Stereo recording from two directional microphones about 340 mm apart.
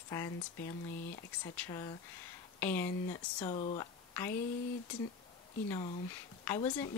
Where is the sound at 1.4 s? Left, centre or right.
Centre.